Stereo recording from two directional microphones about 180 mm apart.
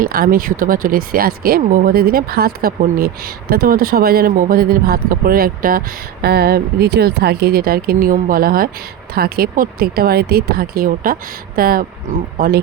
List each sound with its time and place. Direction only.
0.0 s speech: 55° right (ahead or behind)